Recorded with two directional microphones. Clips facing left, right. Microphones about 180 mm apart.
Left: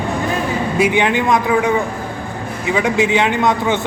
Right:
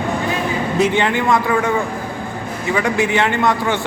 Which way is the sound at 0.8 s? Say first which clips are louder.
Left 1 dB; 15° left (ahead or behind).